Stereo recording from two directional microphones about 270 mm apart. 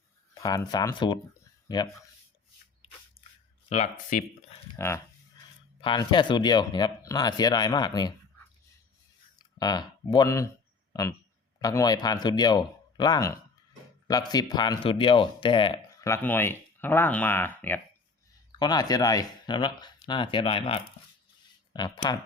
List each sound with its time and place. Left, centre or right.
0.3 s speech: centre
3.2 s a sound: left
3.7 s speech: left
5.8 s speech: centre
9.6 s speech: centre